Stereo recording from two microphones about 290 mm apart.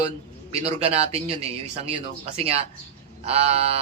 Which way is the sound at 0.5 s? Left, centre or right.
Right.